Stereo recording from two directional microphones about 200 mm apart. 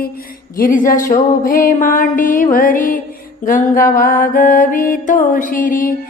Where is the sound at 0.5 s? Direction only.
40° left (ahead or behind).